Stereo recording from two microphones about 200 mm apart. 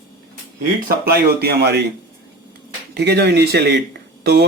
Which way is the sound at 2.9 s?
55° right (ahead or behind).